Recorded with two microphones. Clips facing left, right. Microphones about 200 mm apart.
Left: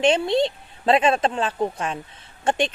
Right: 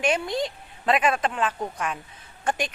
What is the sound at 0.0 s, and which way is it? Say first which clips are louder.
A woman's voice: left 6 dB; 25° left (ahead or behind).